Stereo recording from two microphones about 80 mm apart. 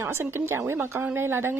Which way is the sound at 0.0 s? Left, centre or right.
Right.